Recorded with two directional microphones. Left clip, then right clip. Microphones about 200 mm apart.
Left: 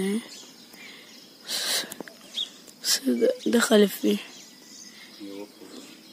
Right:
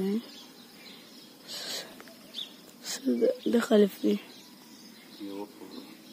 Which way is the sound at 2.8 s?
5° left (ahead or behind).